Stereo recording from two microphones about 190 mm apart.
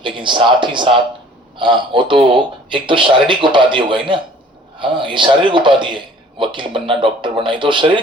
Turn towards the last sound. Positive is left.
turn(degrees=-25)  # may be behind; listen again after turning